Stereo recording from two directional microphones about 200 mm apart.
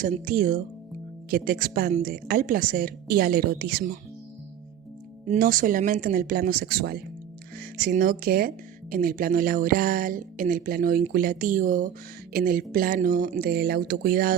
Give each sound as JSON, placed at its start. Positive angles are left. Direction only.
{"t": 0.0, "sound": "speech", "side_deg": -40}
{"t": 5.2, "sound": "speech", "side_deg": -40}